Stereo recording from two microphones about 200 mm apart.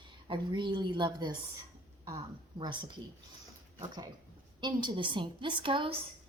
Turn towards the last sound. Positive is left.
turn(degrees=-25)  # may be behind; listen again after turning